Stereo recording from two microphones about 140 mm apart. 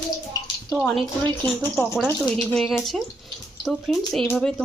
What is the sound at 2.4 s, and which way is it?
Speech, 5° left (ahead or behind).